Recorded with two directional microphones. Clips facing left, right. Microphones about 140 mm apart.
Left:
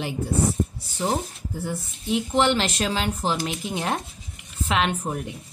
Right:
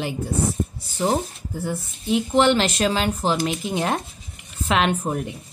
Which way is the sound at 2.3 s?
90° right.